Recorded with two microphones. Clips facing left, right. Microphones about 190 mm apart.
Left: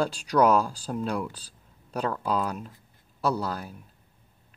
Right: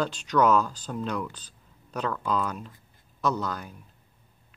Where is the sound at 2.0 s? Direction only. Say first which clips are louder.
Left 1 dB; 35° left (ahead or behind).